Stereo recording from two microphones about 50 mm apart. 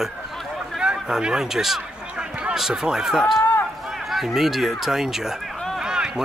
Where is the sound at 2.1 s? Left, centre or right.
Right.